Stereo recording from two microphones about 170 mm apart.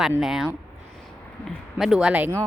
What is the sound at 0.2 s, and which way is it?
A woman's voice, 5° right (ahead or behind).